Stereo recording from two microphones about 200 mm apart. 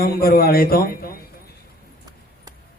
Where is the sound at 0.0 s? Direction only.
50° left (ahead or behind).